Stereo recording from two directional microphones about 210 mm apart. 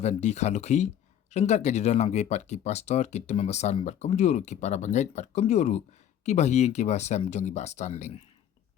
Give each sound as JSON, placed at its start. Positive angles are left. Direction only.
{"t": 0.0, "sound": "speech", "side_deg": 30}